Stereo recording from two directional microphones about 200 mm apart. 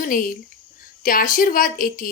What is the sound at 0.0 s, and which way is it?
Speech, 45° left (ahead or behind).